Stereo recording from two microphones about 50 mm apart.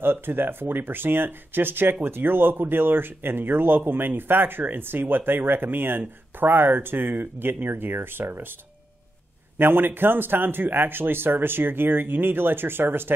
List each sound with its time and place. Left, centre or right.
0.0 s speech: right
9.6 s speech: right